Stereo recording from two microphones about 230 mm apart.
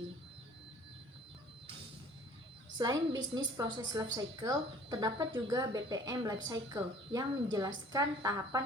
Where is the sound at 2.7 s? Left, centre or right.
Centre.